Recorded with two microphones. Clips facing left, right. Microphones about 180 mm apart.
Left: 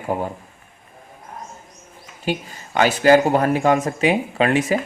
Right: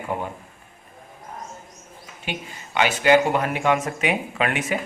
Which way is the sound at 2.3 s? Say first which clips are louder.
Left 8 dB; 40° left (ahead or behind).